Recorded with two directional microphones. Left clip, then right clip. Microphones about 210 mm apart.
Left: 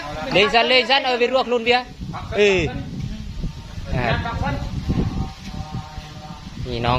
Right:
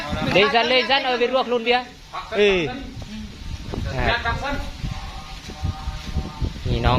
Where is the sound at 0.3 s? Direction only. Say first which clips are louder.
Left 2 dB; 15° left (ahead or behind).